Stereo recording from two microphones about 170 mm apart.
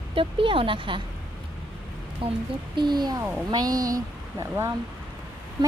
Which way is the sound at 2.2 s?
30° right (ahead or behind).